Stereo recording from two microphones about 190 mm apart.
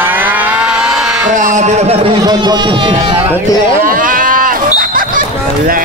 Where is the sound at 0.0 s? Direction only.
10° right (ahead or behind).